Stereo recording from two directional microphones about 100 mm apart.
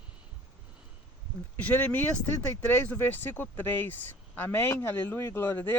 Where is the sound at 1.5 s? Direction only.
15° left (ahead or behind).